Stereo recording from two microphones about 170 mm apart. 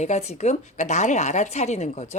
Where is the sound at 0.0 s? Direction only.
40° left (ahead or behind).